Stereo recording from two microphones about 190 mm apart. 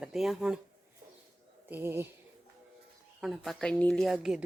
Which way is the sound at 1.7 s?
10° right (ahead or behind).